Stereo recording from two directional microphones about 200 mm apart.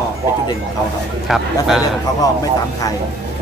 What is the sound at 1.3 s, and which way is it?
Cattle, centre (ahead or behind).